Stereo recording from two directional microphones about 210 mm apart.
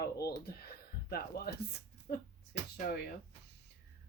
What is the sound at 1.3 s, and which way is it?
Speech, 50° left (ahead or behind).